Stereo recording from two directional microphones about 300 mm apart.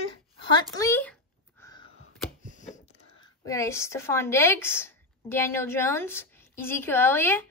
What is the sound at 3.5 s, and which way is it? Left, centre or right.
A woman's voice, centre.